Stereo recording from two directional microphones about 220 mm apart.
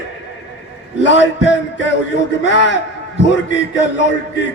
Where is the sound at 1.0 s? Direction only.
55° left (ahead or behind).